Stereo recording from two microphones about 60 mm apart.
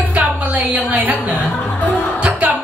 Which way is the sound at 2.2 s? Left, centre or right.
Right.